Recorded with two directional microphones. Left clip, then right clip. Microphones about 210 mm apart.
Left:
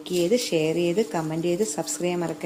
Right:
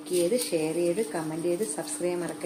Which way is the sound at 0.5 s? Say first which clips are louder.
Left 4 dB; 45° left (ahead or behind).